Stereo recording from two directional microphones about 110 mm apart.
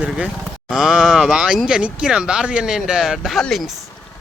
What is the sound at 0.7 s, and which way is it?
Speech, 5° right (ahead or behind).